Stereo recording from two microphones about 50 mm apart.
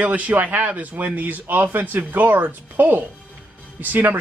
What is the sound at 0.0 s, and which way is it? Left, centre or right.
A man's voice, right.